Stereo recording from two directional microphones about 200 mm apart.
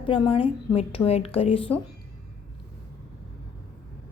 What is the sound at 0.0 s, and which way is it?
Speech, 25° left (ahead or behind).